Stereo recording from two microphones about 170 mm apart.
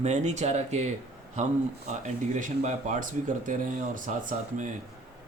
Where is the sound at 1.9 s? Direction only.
45° right (ahead or behind).